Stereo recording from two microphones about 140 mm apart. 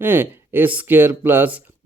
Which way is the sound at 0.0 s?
15° right (ahead or behind).